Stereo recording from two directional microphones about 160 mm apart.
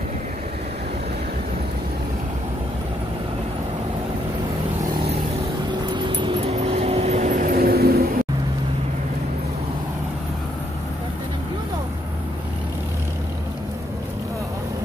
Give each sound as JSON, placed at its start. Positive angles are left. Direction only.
{"t": 5.9, "sound": "vehicle", "side_deg": -30}